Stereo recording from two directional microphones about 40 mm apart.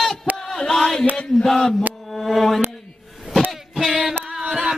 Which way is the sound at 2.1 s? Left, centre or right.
Centre.